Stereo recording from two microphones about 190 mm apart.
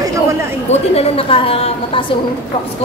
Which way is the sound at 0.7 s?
35° left (ahead or behind).